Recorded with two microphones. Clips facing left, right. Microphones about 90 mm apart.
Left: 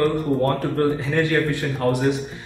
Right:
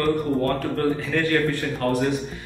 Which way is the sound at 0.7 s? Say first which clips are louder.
Left 3 dB; 20° left (ahead or behind).